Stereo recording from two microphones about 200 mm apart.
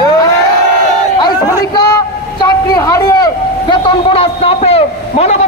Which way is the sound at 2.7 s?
20° left (ahead or behind).